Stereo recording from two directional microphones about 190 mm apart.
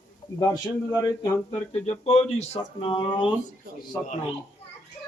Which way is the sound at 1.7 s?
35° left (ahead or behind).